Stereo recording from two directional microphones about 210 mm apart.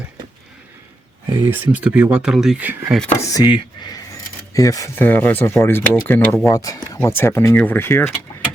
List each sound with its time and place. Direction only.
1.3 s speech: 10° right (ahead or behind)
3.0 s speech: 15° left (ahead or behind)